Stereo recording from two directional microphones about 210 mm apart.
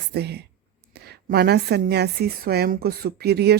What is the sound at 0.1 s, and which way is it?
A woman's voice, 50° right (ahead or behind).